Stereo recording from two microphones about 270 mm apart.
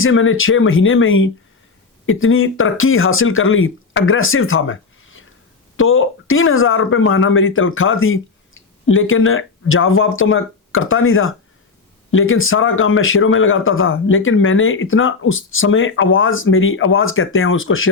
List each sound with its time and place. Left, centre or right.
0.0 s speech: left